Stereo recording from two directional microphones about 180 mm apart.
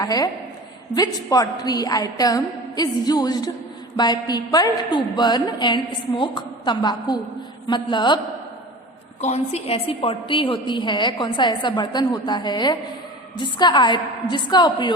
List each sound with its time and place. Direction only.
0.0 s a woman's voice: 20° left (ahead or behind)
9.2 s a woman's voice: 40° left (ahead or behind)